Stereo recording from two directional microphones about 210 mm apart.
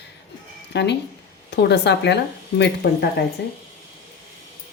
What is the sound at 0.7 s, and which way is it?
Speech, 55° left (ahead or behind).